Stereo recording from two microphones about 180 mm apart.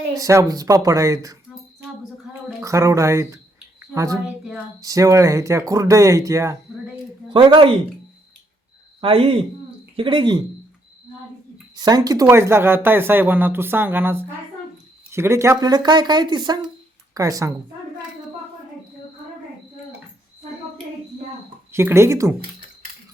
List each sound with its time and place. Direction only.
0.2 s speech: 15° right (ahead or behind)
2.6 s speech: 15° right (ahead or behind)
7.3 s speech: 30° right (ahead or behind)
9.0 s speech: 30° right (ahead or behind)
11.8 s speech: 20° right (ahead or behind)
21.7 s speech: 15° right (ahead or behind)